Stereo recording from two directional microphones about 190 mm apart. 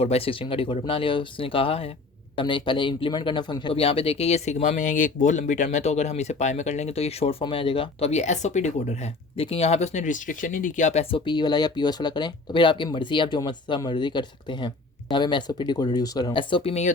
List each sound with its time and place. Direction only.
0.0 s speech: 30° left (ahead or behind)